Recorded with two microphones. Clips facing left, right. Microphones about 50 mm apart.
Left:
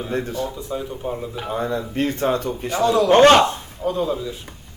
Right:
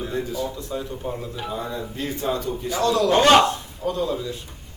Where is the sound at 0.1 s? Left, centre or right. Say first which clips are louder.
Left 5 dB; left.